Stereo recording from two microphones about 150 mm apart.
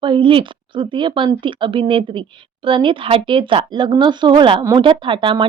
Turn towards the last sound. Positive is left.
turn(degrees=-35)  # may be behind; listen again after turning